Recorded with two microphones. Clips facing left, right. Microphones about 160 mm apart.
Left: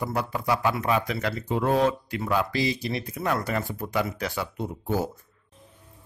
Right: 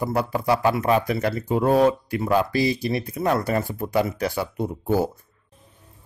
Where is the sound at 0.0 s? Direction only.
30° right (ahead or behind).